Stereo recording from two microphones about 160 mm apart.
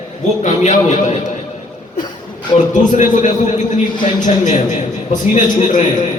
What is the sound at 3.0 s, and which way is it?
Speech, 50° left (ahead or behind).